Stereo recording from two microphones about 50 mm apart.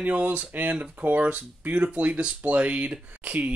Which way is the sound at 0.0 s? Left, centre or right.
Right.